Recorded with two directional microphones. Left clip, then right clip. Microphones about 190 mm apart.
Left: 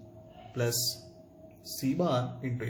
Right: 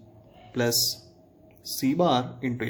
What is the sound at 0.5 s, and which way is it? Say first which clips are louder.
A man's voice: right 6 dB; 50° right (ahead or behind).